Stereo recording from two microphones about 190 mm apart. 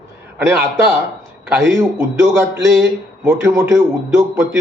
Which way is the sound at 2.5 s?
70° right (ahead or behind).